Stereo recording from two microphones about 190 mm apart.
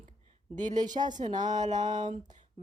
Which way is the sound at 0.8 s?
20° right (ahead or behind).